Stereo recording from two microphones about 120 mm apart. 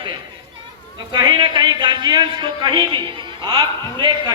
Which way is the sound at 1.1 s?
35° right (ahead or behind).